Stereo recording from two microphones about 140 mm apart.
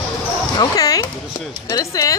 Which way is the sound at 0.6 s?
30° left (ahead or behind).